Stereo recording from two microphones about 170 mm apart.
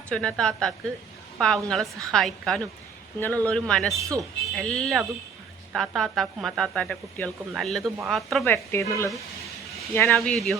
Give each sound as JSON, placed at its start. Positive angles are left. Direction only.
{"t": 0.1, "sound": "speech", "side_deg": 5}
{"t": 8.4, "sound": "speech", "side_deg": 15}
{"t": 10.2, "sound": "speech", "side_deg": 0}